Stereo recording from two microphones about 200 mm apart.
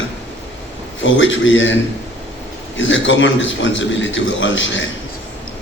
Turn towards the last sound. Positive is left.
turn(degrees=70)  # may be behind; listen again after turning